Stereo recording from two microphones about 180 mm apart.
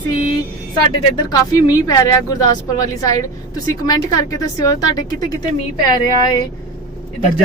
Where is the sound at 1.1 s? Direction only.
20° left (ahead or behind).